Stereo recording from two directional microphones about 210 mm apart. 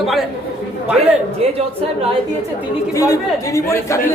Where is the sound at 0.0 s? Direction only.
Centre (ahead or behind).